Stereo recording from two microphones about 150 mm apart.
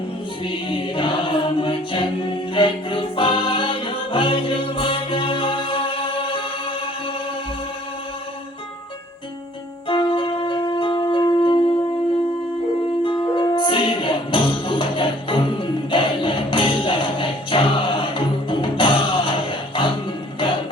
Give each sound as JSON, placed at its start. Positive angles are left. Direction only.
{"t": 0.4, "sound": "chant", "side_deg": 35}
{"t": 9.9, "sound": "wind instrument", "side_deg": 35}
{"t": 11.1, "sound": "music", "side_deg": 30}
{"t": 13.0, "sound": "music", "side_deg": 30}